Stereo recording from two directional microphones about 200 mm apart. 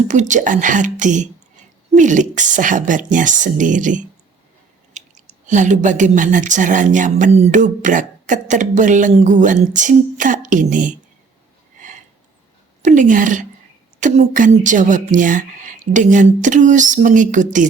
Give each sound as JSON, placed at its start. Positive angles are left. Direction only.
{"t": 0.1, "sound": "a woman's voice", "side_deg": -40}
{"t": 5.5, "sound": "a woman's voice", "side_deg": -40}
{"t": 11.8, "sound": "a sound", "side_deg": -40}
{"t": 12.8, "sound": "a woman's voice", "side_deg": -40}